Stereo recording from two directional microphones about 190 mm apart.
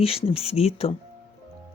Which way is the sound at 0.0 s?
30° left (ahead or behind).